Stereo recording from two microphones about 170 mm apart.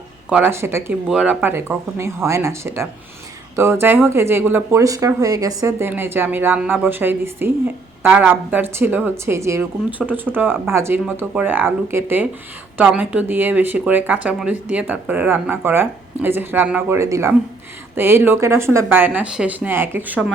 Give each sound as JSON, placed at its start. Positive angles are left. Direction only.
{"t": 0.3, "sound": "speech", "side_deg": -10}
{"t": 1.0, "sound": "speech", "side_deg": -5}
{"t": 10.0, "sound": "speech", "side_deg": 0}